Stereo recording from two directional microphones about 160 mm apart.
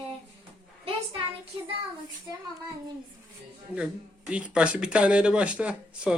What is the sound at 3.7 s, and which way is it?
Speech, 5° right (ahead or behind).